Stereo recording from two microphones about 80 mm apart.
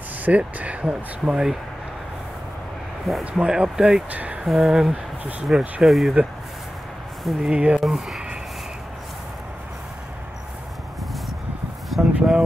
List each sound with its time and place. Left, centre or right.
0.2 s speech: centre
3.3 s speech: centre
4.1 s speech: centre
4.5 s speech: centre
7.5 s speech: centre
7.8 s speech: centre
11.9 s a sound: centre